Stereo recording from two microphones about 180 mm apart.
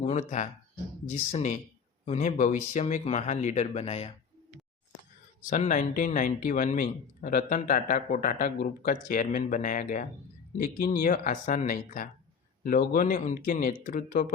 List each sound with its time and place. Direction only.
0.0 s speech: 40° left (ahead or behind)
5.5 s speech: 45° left (ahead or behind)